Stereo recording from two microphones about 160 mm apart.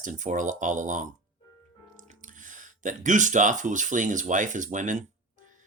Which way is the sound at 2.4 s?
55° right (ahead or behind).